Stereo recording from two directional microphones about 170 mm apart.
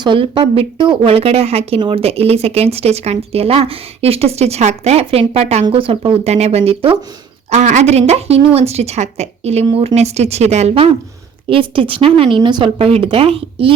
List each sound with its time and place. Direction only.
0.0 s speech: 30° right (ahead or behind)